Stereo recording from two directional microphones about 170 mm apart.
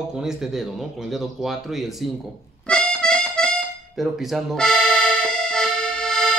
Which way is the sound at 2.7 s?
5° left (ahead or behind).